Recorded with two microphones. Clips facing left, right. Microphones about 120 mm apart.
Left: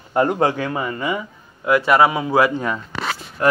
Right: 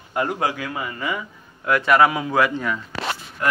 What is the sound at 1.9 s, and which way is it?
Speech, 10° left (ahead or behind).